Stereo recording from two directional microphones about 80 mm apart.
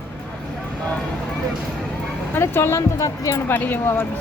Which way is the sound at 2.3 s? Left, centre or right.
Left.